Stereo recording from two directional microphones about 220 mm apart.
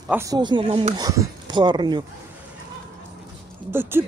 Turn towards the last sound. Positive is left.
turn(degrees=-10)  # may be behind; listen again after turning